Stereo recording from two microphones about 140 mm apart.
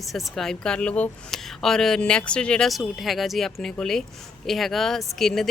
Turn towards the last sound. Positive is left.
turn(degrees=0)  # may be behind; listen again after turning